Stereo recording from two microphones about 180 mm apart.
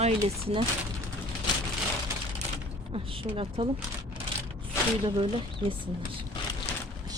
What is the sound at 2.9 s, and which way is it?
Speech, 30° right (ahead or behind).